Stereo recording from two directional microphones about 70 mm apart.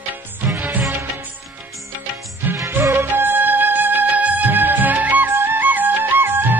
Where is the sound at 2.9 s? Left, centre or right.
Right.